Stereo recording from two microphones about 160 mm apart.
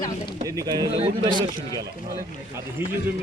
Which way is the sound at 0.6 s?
25° right (ahead or behind).